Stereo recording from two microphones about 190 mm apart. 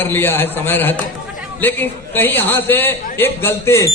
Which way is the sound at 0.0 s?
10° left (ahead or behind).